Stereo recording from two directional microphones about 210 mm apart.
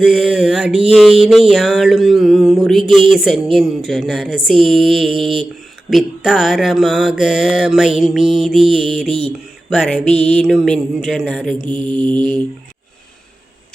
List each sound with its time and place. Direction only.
0.0 s mantra: 5° right (ahead or behind)
11.7 s mantra: 25° right (ahead or behind)